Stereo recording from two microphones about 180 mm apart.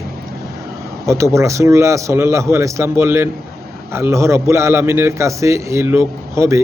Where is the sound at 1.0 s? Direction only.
15° right (ahead or behind).